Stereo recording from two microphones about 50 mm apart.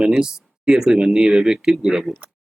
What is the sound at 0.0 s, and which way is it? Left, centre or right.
Speech, centre.